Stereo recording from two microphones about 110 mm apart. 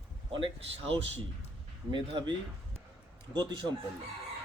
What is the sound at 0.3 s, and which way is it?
Speech, 55° right (ahead or behind).